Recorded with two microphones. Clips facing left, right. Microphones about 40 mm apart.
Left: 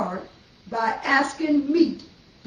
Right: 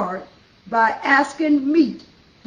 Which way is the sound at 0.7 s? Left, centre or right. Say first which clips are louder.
Right 6 dB; right.